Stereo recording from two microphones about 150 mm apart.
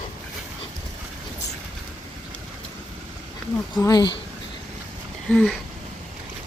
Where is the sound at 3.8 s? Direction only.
25° left (ahead or behind).